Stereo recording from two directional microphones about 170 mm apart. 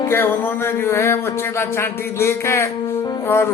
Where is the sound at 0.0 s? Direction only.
10° left (ahead or behind).